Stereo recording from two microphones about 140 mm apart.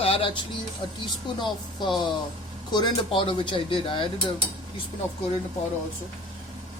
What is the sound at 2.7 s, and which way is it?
Speech, 30° left (ahead or behind).